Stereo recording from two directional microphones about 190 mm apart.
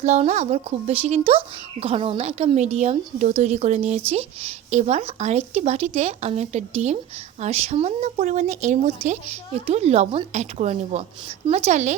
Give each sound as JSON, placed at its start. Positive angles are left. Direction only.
{"t": 0.0, "sound": "speech", "side_deg": -35}